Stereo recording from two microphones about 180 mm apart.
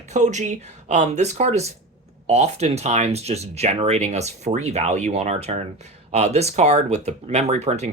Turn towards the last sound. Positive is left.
turn(degrees=-40)  # may be behind; listen again after turning